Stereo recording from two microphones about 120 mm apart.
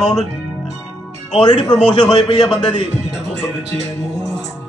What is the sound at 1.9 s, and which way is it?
Speech, 35° left (ahead or behind).